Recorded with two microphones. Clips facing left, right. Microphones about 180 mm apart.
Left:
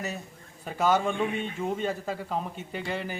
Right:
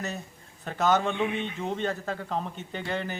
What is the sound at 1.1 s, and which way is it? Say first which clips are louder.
Speech: even; 40° left (ahead or behind).